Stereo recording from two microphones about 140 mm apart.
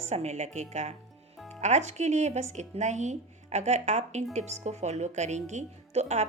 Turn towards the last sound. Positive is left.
turn(degrees=-50)  # may be behind; listen again after turning